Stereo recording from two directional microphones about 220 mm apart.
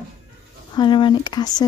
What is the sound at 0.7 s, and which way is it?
Speech, 20° left (ahead or behind).